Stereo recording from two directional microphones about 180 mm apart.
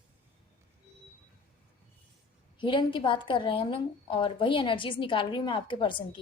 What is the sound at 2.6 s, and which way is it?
A woman's voice, 25° left (ahead or behind).